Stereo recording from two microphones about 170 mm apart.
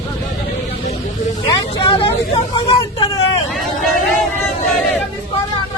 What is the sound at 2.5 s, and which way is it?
Hubbub, 30° left (ahead or behind).